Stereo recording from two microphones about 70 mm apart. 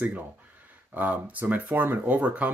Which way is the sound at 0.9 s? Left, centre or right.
Right.